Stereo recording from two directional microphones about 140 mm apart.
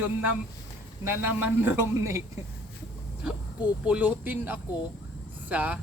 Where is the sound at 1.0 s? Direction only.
15° right (ahead or behind).